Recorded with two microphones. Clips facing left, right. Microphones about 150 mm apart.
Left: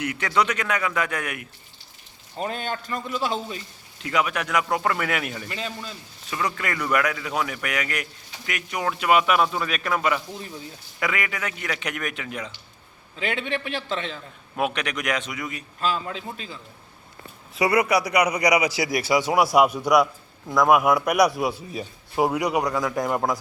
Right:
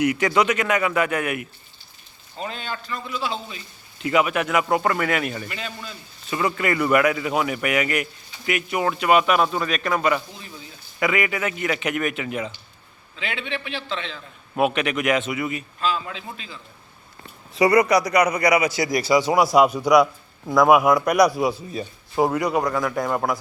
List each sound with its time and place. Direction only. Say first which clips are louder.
0.0 s a man's voice: right 5 dB; 10° right (ahead or behind)
2.4 s a man's voice: left 2 dB; 50° left (ahead or behind)
3.9 s a man's voice: right 4 dB; 5° right (ahead or behind)
5.5 s a man's voice: left 1 dB; 30° left (ahead or behind)
6.3 s a man's voice: right 5 dB; 5° right (ahead or behind)
13.1 s a man's voice: left 3 dB; 45° left (ahead or behind)
14.5 s a man's voice: right 5 dB; 5° right (ahead or behind)
15.8 s a man's voice: even; 45° left (ahead or behind)
17.5 s a man's voice: right 4 dB; 5° left (ahead or behind)